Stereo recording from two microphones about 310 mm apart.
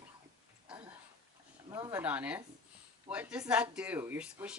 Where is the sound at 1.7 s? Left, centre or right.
Centre.